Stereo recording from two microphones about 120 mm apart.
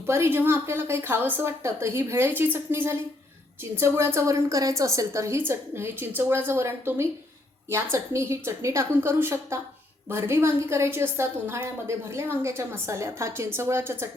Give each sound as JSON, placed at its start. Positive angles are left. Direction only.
{"t": 0.0, "sound": "a woman's voice", "side_deg": -20}